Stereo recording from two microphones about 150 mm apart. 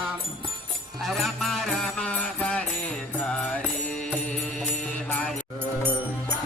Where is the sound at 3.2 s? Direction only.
5° left (ahead or behind).